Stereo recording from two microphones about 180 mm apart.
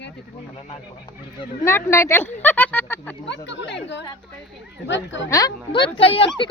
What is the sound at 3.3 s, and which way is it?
Speech, 75° left (ahead or behind).